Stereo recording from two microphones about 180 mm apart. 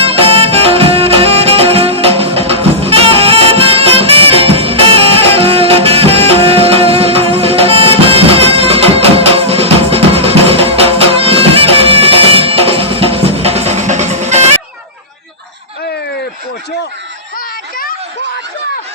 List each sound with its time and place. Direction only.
0.0 s music: 35° right (ahead or behind)